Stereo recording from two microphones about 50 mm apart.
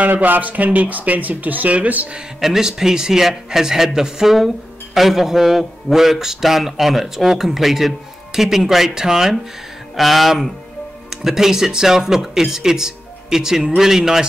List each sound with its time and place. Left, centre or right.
0.0 s speech: right
2.4 s a man's voice: centre
9.9 s a man's voice: centre